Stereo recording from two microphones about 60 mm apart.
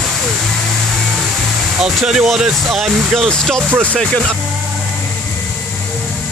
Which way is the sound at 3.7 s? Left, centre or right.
Right.